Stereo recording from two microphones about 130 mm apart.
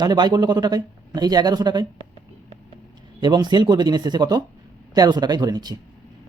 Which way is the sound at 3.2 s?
35° right (ahead or behind).